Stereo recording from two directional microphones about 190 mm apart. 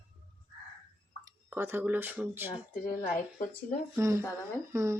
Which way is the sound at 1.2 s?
15° right (ahead or behind).